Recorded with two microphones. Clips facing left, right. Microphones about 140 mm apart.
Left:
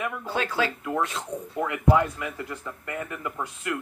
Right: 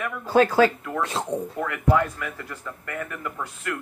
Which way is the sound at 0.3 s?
45° right (ahead or behind).